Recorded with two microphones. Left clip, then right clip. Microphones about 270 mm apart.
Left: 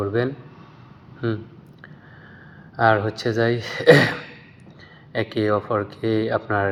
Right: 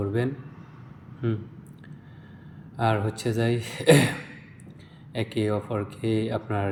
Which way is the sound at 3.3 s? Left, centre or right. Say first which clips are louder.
Left 6 dB; left.